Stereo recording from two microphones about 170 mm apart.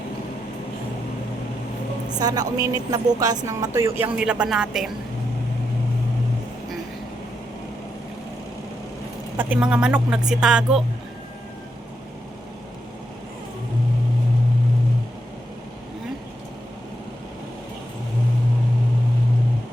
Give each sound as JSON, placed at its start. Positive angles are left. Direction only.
{"t": 2.0, "sound": "speech", "side_deg": -25}
{"t": 9.4, "sound": "speech", "side_deg": -10}